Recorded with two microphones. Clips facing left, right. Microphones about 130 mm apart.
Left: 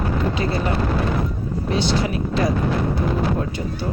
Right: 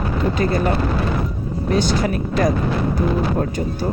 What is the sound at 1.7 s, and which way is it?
Speech, 45° right (ahead or behind).